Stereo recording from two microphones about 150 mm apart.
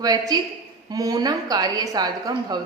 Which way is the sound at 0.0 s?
25° right (ahead or behind).